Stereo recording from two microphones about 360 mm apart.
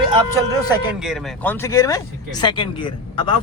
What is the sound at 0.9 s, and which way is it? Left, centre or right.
Speech, centre.